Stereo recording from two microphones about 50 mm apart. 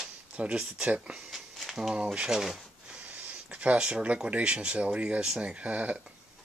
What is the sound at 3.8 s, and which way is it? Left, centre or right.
Speech, right.